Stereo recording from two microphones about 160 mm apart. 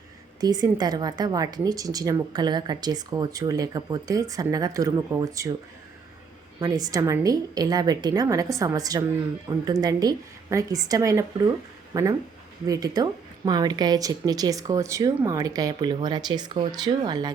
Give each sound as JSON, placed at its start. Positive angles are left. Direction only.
{"t": 0.3, "sound": "speech", "side_deg": -25}
{"t": 6.6, "sound": "speech", "side_deg": -25}